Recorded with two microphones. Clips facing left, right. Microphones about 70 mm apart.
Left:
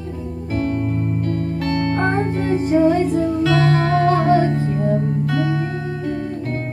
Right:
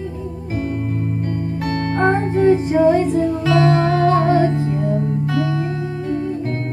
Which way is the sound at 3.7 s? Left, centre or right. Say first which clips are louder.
Right 1 dB; left.